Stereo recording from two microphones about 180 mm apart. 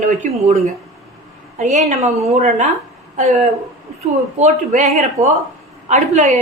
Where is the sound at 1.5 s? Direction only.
40° right (ahead or behind).